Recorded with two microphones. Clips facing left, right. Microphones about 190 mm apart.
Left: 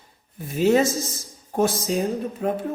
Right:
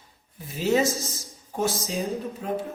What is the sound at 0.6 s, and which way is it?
Speech, 55° left (ahead or behind).